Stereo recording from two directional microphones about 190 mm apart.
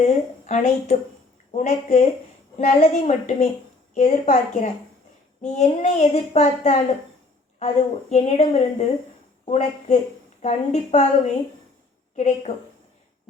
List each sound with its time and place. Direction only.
0.0 s a woman's voice: 40° left (ahead or behind)
8.1 s a woman's voice: 35° left (ahead or behind)